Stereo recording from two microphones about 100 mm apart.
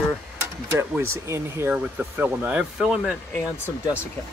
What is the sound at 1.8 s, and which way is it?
Speech, 15° right (ahead or behind).